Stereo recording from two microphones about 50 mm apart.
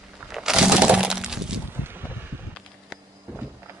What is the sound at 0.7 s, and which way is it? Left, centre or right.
Breaking, centre.